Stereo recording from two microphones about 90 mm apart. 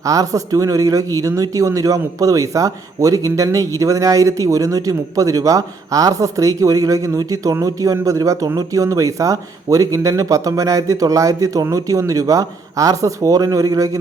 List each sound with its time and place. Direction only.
0.0 s speech: 40° right (ahead or behind)